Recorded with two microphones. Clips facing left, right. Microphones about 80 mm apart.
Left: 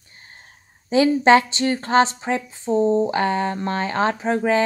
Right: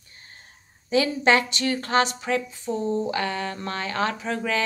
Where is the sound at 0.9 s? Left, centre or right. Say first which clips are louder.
Left 6 dB; left.